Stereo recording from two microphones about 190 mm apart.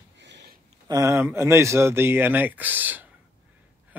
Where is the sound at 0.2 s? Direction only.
65° right (ahead or behind).